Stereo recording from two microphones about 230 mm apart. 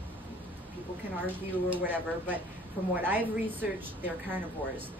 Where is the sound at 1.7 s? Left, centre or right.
Centre.